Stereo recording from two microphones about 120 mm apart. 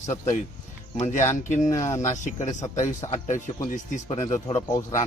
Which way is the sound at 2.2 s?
80° left.